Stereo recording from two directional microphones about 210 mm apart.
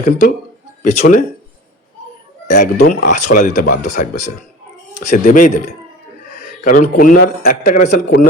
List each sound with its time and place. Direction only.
0.0 s speech: 40° left (ahead or behind)
2.5 s speech: 40° left (ahead or behind)
6.4 s a sound: 40° left (ahead or behind)
6.9 s a man's voice: 40° left (ahead or behind)